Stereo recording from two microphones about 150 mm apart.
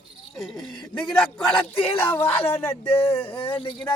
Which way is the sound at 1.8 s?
15° left (ahead or behind).